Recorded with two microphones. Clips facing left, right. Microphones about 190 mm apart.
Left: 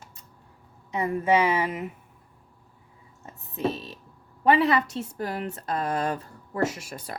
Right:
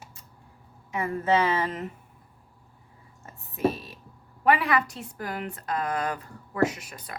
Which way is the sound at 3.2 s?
20° left (ahead or behind).